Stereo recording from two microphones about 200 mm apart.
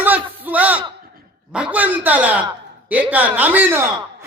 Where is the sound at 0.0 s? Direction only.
10° right (ahead or behind).